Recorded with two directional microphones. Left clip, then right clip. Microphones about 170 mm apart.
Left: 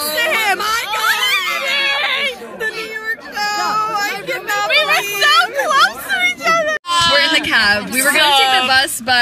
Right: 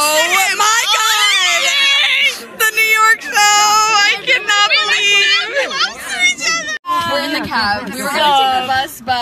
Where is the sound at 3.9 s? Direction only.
5° left (ahead or behind).